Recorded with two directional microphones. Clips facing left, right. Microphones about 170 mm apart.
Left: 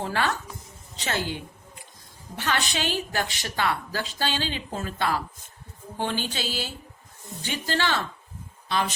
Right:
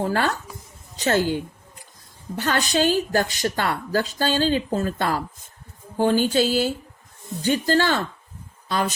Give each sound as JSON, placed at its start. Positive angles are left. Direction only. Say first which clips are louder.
{"t": 0.0, "sound": "a woman's voice", "louder": "right 4 dB", "side_deg": -45}